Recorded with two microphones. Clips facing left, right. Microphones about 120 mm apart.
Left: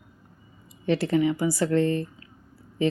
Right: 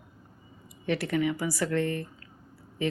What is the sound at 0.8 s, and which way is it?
Speech, 25° left (ahead or behind).